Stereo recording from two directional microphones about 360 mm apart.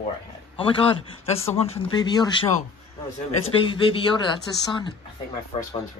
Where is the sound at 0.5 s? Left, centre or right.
Centre.